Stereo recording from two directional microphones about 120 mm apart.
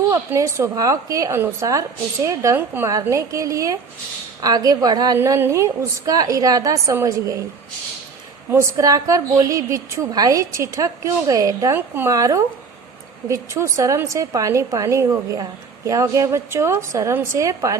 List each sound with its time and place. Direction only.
0.1 s a woman's voice: 20° right (ahead or behind)
5.1 s a woman's voice: 20° right (ahead or behind)
8.4 s a woman's voice: 25° right (ahead or behind)